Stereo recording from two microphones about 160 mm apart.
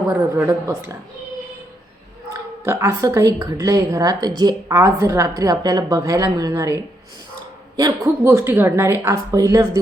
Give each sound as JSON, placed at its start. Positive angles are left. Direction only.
{"t": 0.3, "sound": "a woman's voice", "side_deg": -15}
{"t": 2.6, "sound": "a woman's voice", "side_deg": -15}